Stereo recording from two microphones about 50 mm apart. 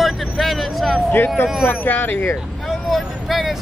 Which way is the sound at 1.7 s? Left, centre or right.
Left.